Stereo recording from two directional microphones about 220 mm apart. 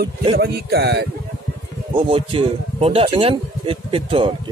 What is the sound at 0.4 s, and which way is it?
Speech, 45° right (ahead or behind).